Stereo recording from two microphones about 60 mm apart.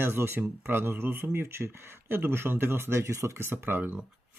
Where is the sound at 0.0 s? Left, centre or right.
Right.